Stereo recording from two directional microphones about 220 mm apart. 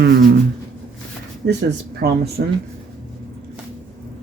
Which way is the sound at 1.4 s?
50° right (ahead or behind).